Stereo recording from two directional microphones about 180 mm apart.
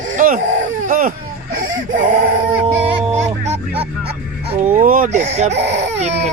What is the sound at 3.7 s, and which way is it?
Speech, 65° right (ahead or behind).